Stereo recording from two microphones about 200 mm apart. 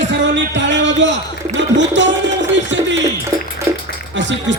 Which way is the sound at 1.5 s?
65° right (ahead or behind).